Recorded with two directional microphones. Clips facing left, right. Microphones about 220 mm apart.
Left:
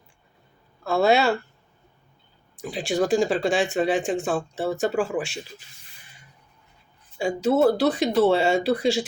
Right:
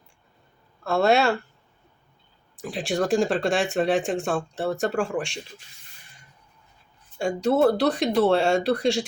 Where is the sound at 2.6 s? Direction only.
Centre (ahead or behind).